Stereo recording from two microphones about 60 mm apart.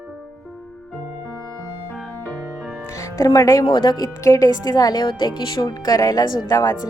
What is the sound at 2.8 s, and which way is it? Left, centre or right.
Speech, left.